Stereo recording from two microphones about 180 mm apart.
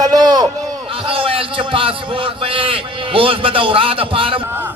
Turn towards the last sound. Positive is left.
turn(degrees=-10)  # may be behind; listen again after turning